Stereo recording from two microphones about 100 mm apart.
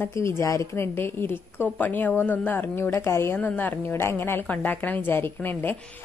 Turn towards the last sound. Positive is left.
turn(degrees=20)  # may be behind; listen again after turning